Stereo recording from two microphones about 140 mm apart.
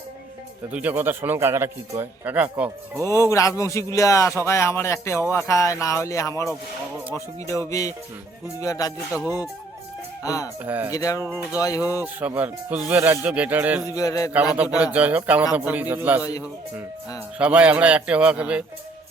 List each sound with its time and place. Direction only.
0.7 s a man's voice: 10° right (ahead or behind)
3.0 s speech: 20° left (ahead or behind)
9.2 s a man's voice: 10° right (ahead or behind)
10.2 s speech: 25° left (ahead or behind)
10.6 s a man's voice: 15° right (ahead or behind)
10.9 s speech: 25° left (ahead or behind)
12.0 s a man's voice: 10° right (ahead or behind)
13.8 s speech: 25° left (ahead or behind)
14.9 s a man's voice: 10° right (ahead or behind)
17.3 s a man's voice: 10° right (ahead or behind)